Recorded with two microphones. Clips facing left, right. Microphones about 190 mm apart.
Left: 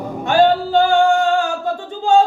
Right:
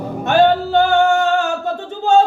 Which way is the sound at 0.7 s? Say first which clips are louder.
Even; 20° right (ahead or behind).